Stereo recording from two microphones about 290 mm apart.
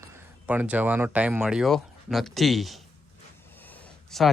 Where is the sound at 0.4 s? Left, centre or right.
Centre.